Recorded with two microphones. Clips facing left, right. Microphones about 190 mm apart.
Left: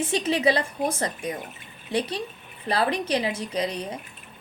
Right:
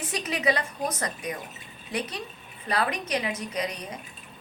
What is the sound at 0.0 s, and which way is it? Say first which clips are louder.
A woman's voice: left 5 dB; 30° left (ahead or behind).